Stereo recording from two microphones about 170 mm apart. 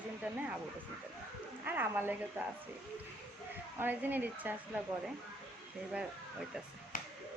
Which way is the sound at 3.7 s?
10° right (ahead or behind).